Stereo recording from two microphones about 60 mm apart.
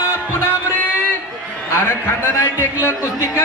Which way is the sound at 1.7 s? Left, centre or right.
Left.